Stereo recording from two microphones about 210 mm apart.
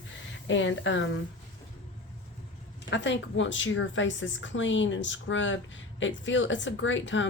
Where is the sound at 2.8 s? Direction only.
60° left (ahead or behind).